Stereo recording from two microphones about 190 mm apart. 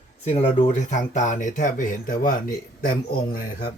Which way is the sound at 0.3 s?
35° left (ahead or behind).